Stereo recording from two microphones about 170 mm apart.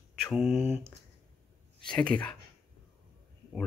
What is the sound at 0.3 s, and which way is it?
Speech, 5° right (ahead or behind).